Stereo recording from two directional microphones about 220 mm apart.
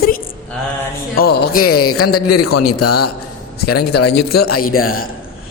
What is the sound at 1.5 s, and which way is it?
A man's voice, 90° left.